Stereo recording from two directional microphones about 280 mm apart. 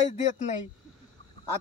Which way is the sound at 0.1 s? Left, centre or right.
Left.